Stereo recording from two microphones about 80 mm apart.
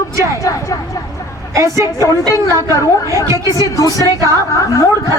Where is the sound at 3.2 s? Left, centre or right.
Left.